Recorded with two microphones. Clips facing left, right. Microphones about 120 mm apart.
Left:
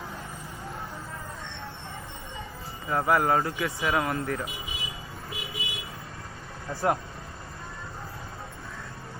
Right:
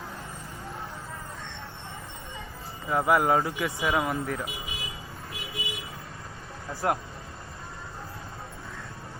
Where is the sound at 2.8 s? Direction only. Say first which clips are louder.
Right 1 dB; 5° right (ahead or behind).